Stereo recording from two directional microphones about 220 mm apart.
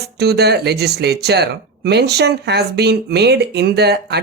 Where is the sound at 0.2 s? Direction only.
50° right (ahead or behind).